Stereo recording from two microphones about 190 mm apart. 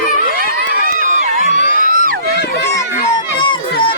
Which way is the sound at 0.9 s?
40° right (ahead or behind).